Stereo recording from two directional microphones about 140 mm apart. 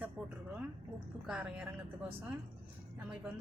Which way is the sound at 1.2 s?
5° right (ahead or behind).